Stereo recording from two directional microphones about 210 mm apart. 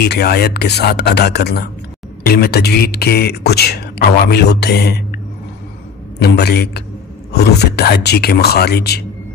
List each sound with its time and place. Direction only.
0.0 s speech: 50° left (ahead or behind)